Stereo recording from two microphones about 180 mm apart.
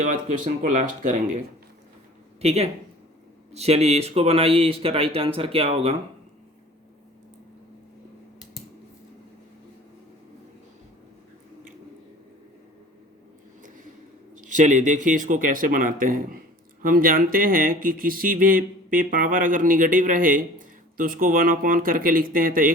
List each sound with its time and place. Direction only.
0.0 s speech: 45° right (ahead or behind)
2.4 s speech: 35° right (ahead or behind)
14.4 s speech: 45° right (ahead or behind)